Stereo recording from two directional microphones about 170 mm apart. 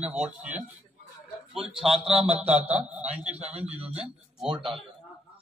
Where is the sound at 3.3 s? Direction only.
35° right (ahead or behind).